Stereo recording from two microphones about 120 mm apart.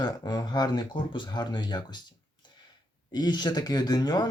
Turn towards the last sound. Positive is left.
turn(degrees=35)  # may be behind; listen again after turning